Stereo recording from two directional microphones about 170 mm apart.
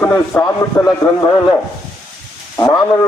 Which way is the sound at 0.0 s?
15° left (ahead or behind).